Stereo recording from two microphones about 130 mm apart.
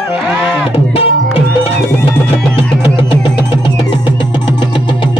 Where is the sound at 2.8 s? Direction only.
40° left (ahead or behind).